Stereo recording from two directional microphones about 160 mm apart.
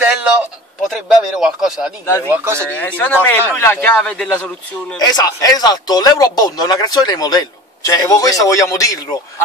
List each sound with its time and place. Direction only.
0.0 s a sound: 10° right (ahead or behind)
0.8 s speech: 5° right (ahead or behind)
2.3 s speech: 15° right (ahead or behind)
2.7 s a man's voice: 10° left (ahead or behind)
4.9 s speech: 25° left (ahead or behind)